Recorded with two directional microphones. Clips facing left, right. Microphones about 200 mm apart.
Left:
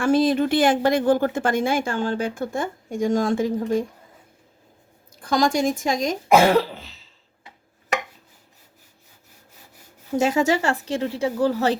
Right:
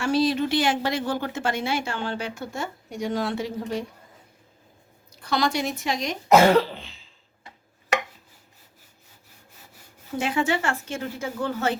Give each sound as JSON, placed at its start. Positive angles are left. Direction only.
{"t": 0.0, "sound": "a woman's voice", "side_deg": 50}
{"t": 5.2, "sound": "a woman's voice", "side_deg": 45}
{"t": 6.2, "sound": "cough", "side_deg": 10}
{"t": 10.2, "sound": "speech", "side_deg": 40}